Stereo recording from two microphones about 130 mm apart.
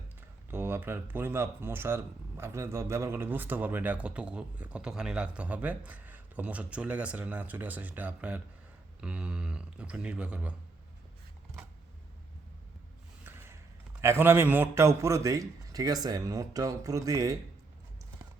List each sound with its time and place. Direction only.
0.2 s speech: 15° right (ahead or behind)
13.2 s a sound: 20° right (ahead or behind)
14.0 s a man's voice: 20° right (ahead or behind)